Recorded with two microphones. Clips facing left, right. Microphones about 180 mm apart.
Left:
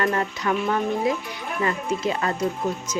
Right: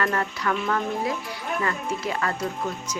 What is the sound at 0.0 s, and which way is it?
Speech, 20° left (ahead or behind).